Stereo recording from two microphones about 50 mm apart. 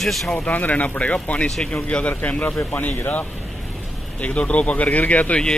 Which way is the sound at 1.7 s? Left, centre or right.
Left.